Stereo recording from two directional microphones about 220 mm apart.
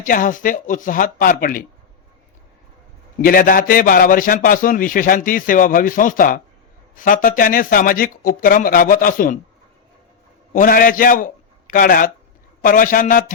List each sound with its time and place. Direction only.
0.0 s a man's voice: 35° left (ahead or behind)
3.2 s a man's voice: 40° left (ahead or behind)
10.5 s a man's voice: 40° left (ahead or behind)